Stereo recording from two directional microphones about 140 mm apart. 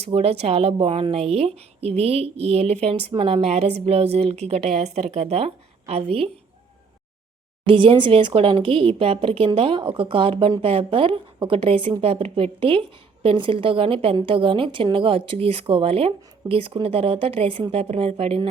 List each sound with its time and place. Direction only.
0.0 s a woman's voice: 45° right (ahead or behind)
7.7 s a woman's voice: 40° right (ahead or behind)